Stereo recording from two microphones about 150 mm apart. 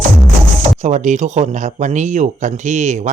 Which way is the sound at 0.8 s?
50° right (ahead or behind).